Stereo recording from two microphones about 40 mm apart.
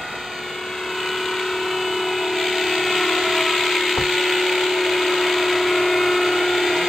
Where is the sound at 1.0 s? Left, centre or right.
Centre.